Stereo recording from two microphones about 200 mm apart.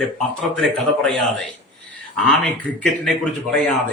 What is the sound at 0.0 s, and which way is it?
A man's voice, centre (ahead or behind).